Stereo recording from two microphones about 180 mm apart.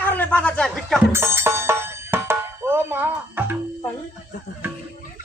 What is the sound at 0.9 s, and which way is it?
Music, 15° right (ahead or behind).